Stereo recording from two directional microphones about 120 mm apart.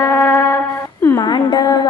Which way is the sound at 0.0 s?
20° left (ahead or behind).